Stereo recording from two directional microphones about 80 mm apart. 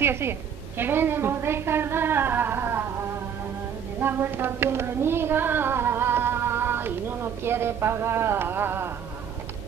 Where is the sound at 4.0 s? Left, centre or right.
Right.